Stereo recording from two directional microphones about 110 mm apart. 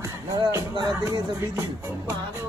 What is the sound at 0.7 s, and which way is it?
Speech, 45° right (ahead or behind).